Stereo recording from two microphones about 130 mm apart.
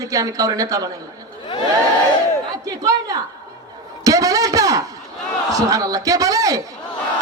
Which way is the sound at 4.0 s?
25° right (ahead or behind).